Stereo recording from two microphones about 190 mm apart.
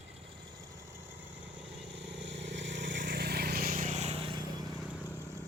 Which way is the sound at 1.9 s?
65° right (ahead or behind).